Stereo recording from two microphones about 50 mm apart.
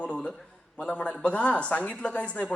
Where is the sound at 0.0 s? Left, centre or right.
Left.